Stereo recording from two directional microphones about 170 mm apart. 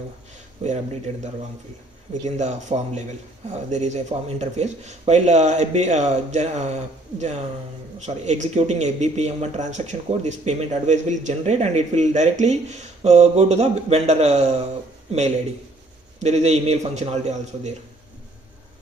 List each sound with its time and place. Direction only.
0.6 s speech: 35° right (ahead or behind)
2.2 s speech: 45° right (ahead or behind)
16.2 s speech: 40° right (ahead or behind)